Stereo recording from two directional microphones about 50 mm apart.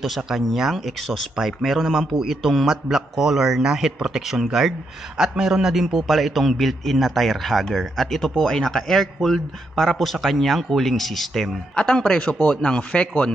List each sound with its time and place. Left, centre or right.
0.0 s a man's voice: centre
11.7 s speech: centre